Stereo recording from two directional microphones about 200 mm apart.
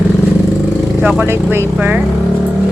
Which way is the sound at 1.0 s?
10° right (ahead or behind).